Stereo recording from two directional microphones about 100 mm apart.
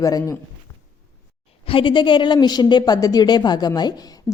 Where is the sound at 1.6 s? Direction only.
60° left (ahead or behind).